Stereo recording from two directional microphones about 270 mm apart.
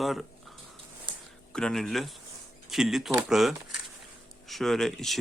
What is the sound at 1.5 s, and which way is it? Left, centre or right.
Speech, centre.